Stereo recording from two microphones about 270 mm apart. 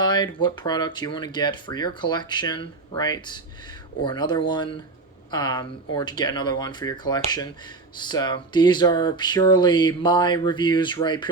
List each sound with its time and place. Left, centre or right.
0.0 s speech: centre